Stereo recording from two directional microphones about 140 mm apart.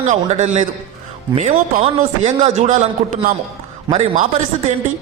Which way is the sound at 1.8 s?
50° right (ahead or behind).